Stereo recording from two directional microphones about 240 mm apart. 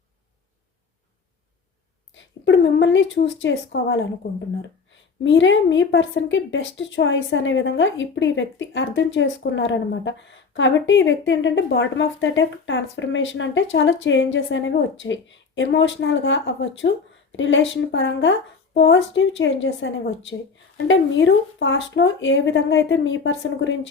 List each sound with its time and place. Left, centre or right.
2.1 s a woman's voice: left